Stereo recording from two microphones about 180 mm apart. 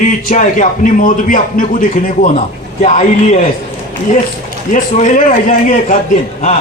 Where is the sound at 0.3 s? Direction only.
45° left (ahead or behind).